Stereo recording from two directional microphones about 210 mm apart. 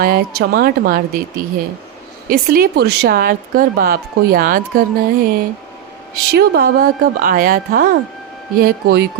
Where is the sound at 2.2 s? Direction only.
45° right (ahead or behind).